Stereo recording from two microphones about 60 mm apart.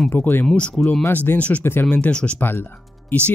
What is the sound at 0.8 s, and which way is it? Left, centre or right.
Speech, centre.